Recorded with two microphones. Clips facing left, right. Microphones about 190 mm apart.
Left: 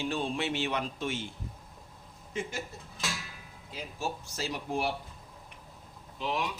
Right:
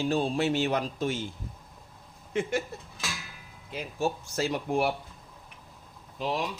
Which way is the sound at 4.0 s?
55° right (ahead or behind).